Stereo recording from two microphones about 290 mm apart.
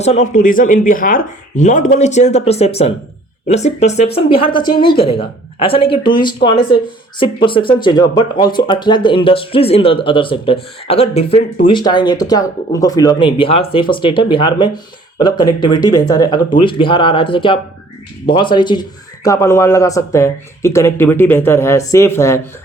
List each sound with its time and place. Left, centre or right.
0.0 s speech: left